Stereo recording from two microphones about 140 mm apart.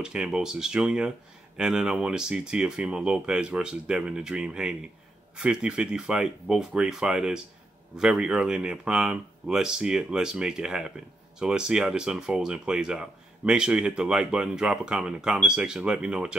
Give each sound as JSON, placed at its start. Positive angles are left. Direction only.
{"t": 0.0, "sound": "speech", "side_deg": -5}